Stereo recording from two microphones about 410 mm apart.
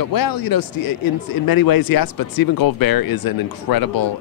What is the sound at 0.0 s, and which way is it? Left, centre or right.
Speech, left.